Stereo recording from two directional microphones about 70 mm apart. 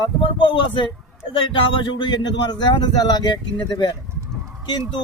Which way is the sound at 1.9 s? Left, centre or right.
Left.